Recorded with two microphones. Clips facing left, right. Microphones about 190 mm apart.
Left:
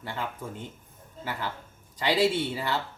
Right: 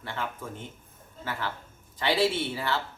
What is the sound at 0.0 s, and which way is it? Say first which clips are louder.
A man's voice: even; 15° left (ahead or behind).